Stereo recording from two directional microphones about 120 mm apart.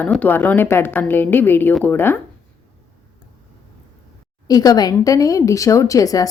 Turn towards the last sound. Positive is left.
turn(degrees=30)  # may be behind; listen again after turning